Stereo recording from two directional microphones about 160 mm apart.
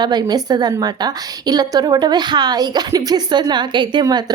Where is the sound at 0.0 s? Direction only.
25° right (ahead or behind).